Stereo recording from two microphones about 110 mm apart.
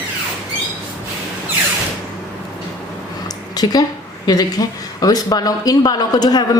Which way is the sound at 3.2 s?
35° left (ahead or behind).